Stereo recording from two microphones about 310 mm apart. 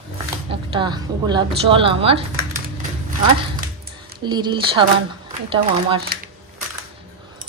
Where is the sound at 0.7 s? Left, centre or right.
Centre.